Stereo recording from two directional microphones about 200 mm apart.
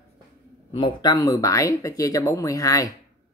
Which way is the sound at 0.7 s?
20° left (ahead or behind).